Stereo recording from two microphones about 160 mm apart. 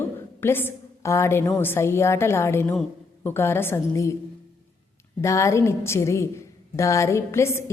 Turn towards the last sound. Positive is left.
turn(degrees=15)  # may be behind; listen again after turning